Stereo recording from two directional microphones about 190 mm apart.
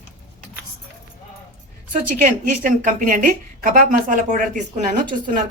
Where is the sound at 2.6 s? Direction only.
45° right (ahead or behind).